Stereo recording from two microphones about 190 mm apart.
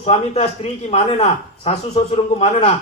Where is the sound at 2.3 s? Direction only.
35° left (ahead or behind).